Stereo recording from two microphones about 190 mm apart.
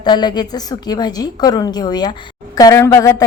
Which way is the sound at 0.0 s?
20° left (ahead or behind).